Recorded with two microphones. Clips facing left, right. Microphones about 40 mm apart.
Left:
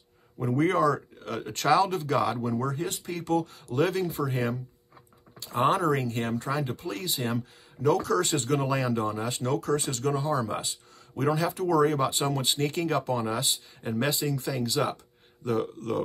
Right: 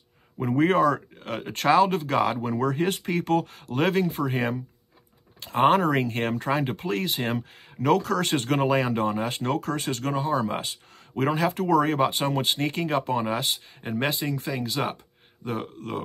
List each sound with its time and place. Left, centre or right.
0.4 s speech: right